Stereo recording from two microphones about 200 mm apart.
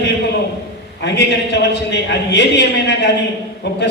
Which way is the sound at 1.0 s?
60° left (ahead or behind).